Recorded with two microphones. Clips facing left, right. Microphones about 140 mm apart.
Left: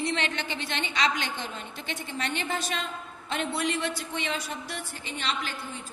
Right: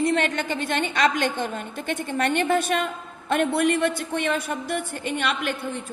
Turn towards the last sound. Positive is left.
turn(degrees=-60)  # may be behind; listen again after turning